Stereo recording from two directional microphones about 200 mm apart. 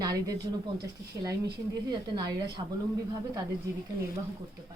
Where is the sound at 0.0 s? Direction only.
15° right (ahead or behind).